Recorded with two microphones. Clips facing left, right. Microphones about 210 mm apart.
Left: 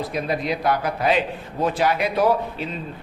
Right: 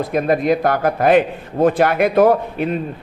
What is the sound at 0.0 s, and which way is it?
A man's voice, 50° right (ahead or behind).